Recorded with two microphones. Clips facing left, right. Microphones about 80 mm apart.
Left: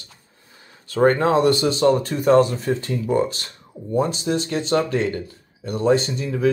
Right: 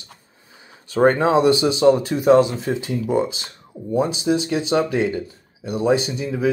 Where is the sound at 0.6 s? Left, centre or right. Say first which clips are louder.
Right 1 dB; centre.